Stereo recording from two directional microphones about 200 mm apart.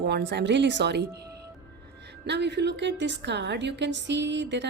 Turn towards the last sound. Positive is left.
turn(degrees=-60)  # may be behind; listen again after turning